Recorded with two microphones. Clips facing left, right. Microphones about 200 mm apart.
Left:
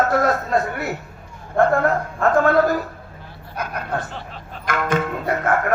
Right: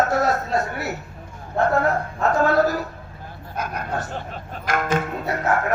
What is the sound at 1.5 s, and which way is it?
A man's voice, 55° left (ahead or behind).